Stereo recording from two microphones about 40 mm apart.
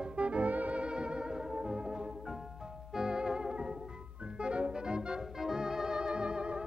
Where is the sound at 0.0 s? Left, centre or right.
Right.